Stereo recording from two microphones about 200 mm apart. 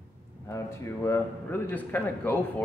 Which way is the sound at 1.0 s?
15° left (ahead or behind).